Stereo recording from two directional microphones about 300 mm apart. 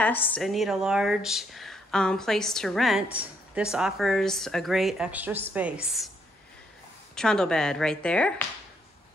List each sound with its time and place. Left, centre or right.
0.0 s speech: centre
7.2 s speech: centre